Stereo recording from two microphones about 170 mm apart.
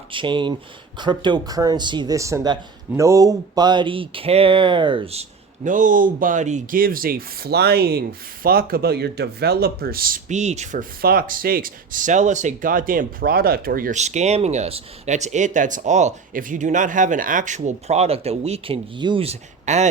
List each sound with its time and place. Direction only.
0.1 s speech: 30° right (ahead or behind)
5.6 s speech: 50° right (ahead or behind)
10.2 s speech: 40° right (ahead or behind)